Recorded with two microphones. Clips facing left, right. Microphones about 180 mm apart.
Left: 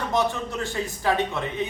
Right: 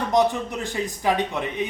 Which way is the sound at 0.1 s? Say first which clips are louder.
Right 5 dB; 15° right (ahead or behind).